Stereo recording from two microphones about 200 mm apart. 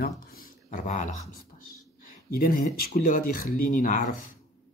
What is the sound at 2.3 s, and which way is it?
Speech, 45° left (ahead or behind).